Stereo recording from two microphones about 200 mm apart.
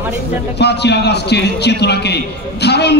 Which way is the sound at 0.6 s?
55° left (ahead or behind).